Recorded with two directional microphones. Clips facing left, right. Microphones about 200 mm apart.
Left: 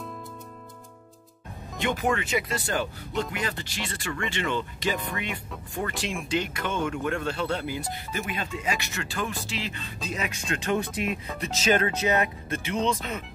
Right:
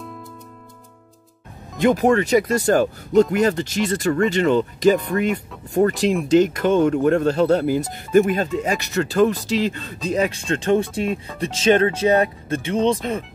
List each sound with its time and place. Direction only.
1.8 s speech: 40° right (ahead or behind)